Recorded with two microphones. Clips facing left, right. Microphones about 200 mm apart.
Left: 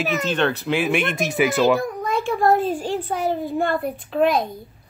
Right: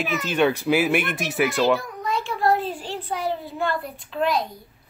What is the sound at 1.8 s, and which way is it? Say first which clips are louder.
A child's voice: left 5 dB; 50° left (ahead or behind).